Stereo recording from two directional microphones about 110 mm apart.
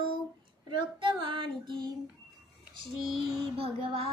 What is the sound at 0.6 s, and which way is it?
Child singing, 50° right (ahead or behind).